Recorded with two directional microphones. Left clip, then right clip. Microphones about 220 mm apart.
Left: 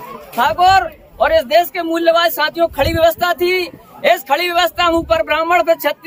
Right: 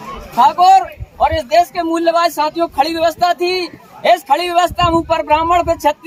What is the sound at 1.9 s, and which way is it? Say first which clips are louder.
Speech: even; centre (ahead or behind).